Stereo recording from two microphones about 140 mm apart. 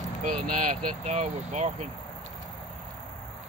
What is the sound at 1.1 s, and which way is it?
Speech, 55° right (ahead or behind).